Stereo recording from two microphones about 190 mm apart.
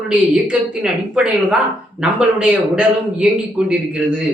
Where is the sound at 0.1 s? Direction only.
5° right (ahead or behind).